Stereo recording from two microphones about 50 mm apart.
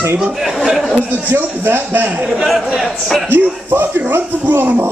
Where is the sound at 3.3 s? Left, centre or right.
Right.